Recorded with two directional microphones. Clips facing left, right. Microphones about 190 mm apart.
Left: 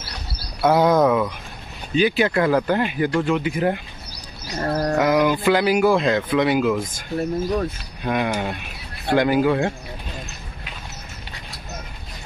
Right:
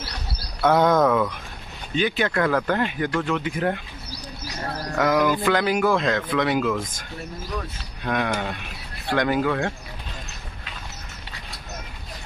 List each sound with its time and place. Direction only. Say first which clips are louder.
0.6 s speech: left 2 dB; 10° left (ahead or behind)
4.6 s a sound: left 10 dB; 50° left (ahead or behind)
4.9 s music: left 1 dB; 10° left (ahead or behind)
5.3 s speech: left 3 dB; 10° left (ahead or behind)
8.0 s speech: left 2 dB; 10° left (ahead or behind)